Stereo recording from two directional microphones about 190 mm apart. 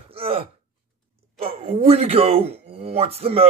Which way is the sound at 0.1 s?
30° right (ahead or behind).